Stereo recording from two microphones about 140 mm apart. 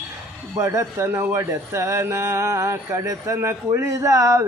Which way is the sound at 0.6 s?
20° right (ahead or behind).